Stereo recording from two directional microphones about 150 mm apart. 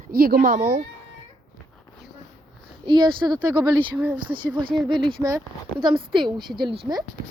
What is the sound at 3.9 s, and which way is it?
Speech, 10° right (ahead or behind).